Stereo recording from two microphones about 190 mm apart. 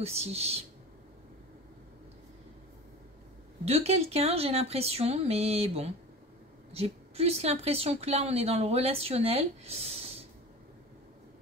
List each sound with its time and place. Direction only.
0.0 s a woman's voice: 35° right (ahead or behind)
3.6 s a woman's voice: 35° right (ahead or behind)